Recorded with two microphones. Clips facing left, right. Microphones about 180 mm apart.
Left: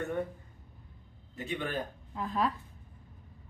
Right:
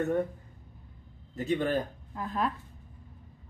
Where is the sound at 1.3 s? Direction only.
40° right (ahead or behind).